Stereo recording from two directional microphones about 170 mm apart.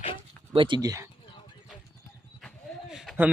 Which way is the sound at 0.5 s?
30° right (ahead or behind).